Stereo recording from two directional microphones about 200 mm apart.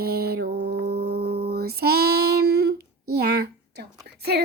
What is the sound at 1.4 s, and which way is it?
Female singing, 50° right (ahead or behind).